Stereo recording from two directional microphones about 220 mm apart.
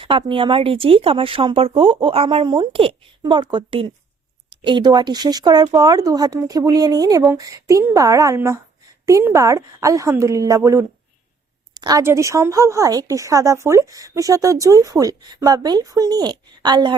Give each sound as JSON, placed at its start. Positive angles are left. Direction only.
{"t": 0.0, "sound": "a woman's voice", "side_deg": -25}